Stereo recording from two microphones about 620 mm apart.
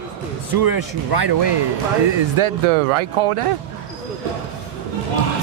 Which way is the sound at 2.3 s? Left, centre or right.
Right.